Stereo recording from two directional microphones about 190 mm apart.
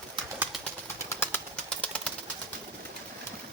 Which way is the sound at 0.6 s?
15° left (ahead or behind).